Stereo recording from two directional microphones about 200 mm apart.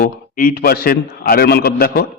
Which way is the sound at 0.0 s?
45° left (ahead or behind).